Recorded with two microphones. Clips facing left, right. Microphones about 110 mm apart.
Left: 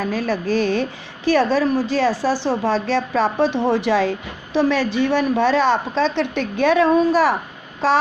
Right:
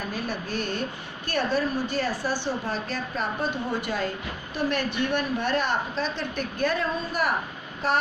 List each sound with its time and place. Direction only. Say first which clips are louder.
0.0 s a woman's voice: left 9 dB; 90° left